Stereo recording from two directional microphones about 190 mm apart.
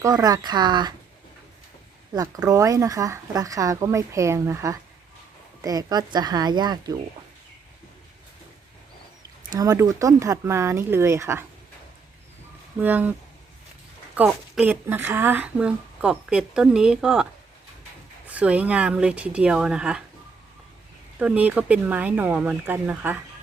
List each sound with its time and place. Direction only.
0.0 s speech: 20° right (ahead or behind)
2.1 s speech: 20° right (ahead or behind)
9.6 s speech: 20° right (ahead or behind)
12.8 s speech: 10° right (ahead or behind)
14.2 s speech: 5° right (ahead or behind)
18.3 s speech: 5° right (ahead or behind)
21.2 s speech: 10° right (ahead or behind)